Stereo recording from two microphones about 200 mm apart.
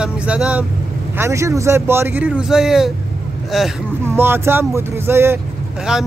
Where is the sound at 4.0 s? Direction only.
10° right (ahead or behind).